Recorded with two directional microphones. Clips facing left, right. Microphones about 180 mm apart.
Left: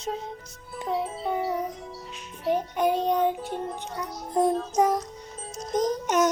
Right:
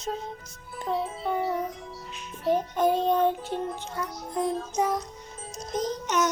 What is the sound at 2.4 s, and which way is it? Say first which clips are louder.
Child singing: right 1 dB; 15° left (ahead or behind).